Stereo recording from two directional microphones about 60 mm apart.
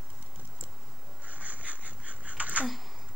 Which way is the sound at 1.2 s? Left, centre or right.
Right.